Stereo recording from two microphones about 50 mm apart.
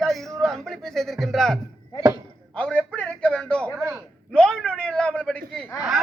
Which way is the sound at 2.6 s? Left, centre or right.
Left.